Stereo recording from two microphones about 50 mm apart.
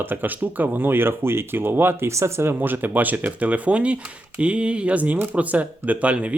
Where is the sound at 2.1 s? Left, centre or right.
Right.